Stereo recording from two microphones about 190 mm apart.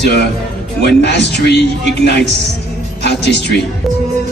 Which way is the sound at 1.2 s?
60° left (ahead or behind).